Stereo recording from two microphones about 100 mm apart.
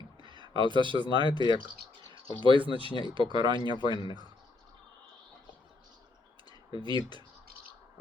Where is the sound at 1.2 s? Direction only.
50° left (ahead or behind).